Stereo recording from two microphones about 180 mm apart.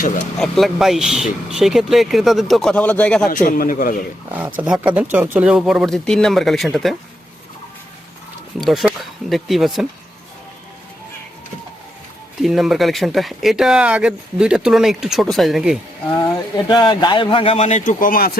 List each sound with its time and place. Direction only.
0.3 s speech: centre (ahead or behind)
3.2 s a man's voice: 50° left (ahead or behind)
4.3 s speech: 10° right (ahead or behind)
8.6 s speech: centre (ahead or behind)
12.4 s speech: centre (ahead or behind)
16.2 s speech: 25° left (ahead or behind); by 18.3 s 55° left (ahead or behind)